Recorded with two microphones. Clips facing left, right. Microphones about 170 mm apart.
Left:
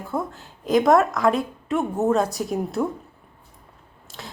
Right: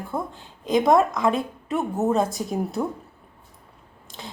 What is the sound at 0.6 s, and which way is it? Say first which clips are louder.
Speech: left 1 dB; centre (ahead or behind).